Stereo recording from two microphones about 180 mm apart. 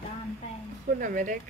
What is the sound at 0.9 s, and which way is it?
Speech, 50° right (ahead or behind).